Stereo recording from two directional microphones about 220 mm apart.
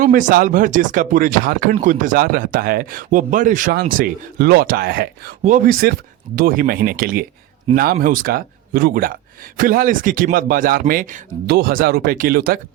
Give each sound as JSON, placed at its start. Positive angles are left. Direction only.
{"t": 0.0, "sound": "speech", "side_deg": -35}